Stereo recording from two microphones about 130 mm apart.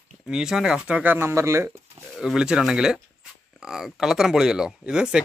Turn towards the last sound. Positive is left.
turn(degrees=-5)  # may be behind; listen again after turning